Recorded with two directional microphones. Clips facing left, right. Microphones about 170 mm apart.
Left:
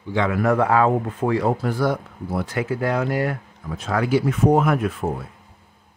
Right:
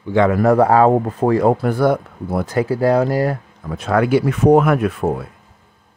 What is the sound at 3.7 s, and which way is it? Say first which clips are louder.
Speech: right 5 dB; 60° right (ahead or behind).